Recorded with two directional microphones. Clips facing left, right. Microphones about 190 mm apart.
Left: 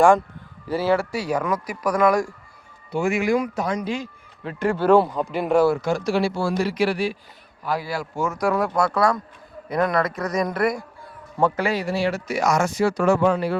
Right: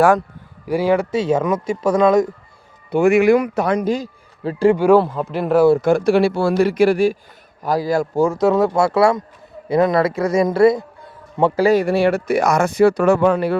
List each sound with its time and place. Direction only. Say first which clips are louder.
0.7 s speech: right 4 dB; 15° right (ahead or behind)
2.9 s speech: right 8 dB; 60° right (ahead or behind)
3.8 s speech: right 7 dB; 35° right (ahead or behind)
4.7 s speech: right 3 dB; 10° right (ahead or behind)
4.9 s speech: right 2 dB; centre (ahead or behind)
5.8 s speech: right 7 dB; 55° right (ahead or behind); by 11.6 s 25° right (ahead or behind)
11.6 s speech: right 8 dB; 50° right (ahead or behind)